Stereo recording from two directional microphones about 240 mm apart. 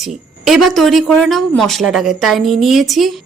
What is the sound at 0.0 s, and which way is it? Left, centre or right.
Speech, centre.